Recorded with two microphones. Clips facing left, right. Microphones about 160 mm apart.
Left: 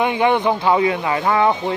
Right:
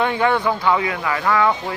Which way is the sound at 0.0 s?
20° left (ahead or behind).